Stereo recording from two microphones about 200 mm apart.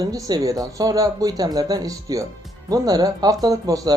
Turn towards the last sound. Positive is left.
turn(degrees=-15)  # may be behind; listen again after turning